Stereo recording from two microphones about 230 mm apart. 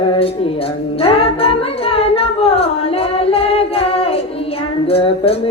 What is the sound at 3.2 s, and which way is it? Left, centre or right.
Music, left.